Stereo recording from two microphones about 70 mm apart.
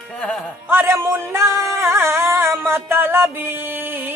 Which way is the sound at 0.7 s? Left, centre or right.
Right.